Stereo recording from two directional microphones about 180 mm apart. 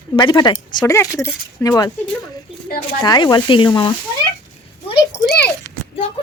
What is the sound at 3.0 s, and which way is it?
Speech, 25° left (ahead or behind).